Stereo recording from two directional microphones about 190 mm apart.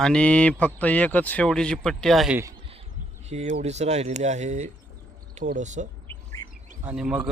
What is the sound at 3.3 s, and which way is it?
Speech, 35° right (ahead or behind).